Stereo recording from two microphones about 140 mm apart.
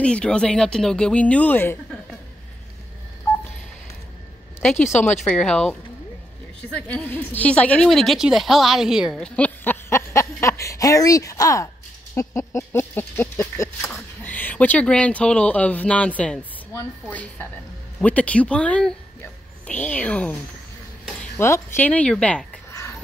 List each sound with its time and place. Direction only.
0.0 s speech: 5° left (ahead or behind)
5.2 s a woman's voice: 5° left (ahead or behind)
9.2 s speech: 10° left (ahead or behind)
21.4 s speech: 15° left (ahead or behind)
22.7 s a sound: 20° left (ahead or behind)